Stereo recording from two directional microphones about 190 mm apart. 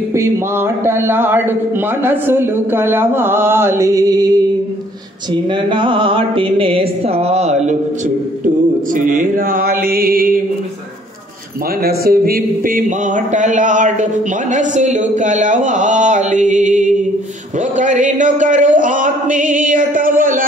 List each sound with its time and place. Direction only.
0.1 s a man's voice: 15° right (ahead or behind)
5.3 s a sound: 25° right (ahead or behind)
8.9 s speech: 45° right (ahead or behind)
11.8 s speech: 55° right (ahead or behind)